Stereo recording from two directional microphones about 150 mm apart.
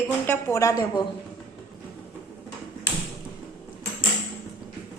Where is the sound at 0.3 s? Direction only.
15° left (ahead or behind).